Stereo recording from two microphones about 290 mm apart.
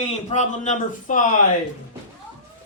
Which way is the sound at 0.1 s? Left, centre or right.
Left.